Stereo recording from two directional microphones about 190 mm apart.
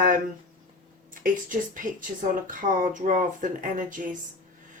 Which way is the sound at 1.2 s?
45° right (ahead or behind).